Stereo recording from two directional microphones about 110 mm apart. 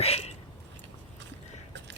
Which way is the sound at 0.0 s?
70° left (ahead or behind).